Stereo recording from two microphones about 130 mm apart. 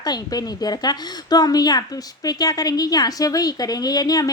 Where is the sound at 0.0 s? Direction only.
30° left (ahead or behind).